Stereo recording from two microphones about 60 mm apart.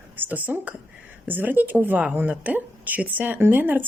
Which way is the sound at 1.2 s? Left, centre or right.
Right.